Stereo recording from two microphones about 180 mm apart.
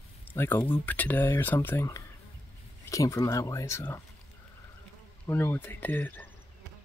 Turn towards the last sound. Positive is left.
turn(degrees=10)  # may be behind; listen again after turning